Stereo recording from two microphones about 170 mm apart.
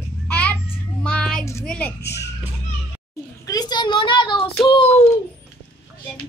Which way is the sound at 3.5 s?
25° left (ahead or behind).